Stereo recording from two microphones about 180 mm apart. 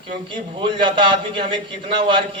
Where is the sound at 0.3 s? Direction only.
25° right (ahead or behind).